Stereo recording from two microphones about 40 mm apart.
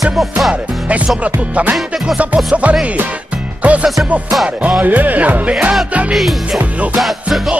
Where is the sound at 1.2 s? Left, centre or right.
Right.